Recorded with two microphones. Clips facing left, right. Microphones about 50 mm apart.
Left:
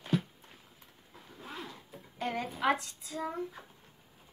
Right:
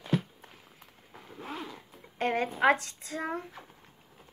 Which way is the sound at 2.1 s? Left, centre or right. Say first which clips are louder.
Right 6 dB; right.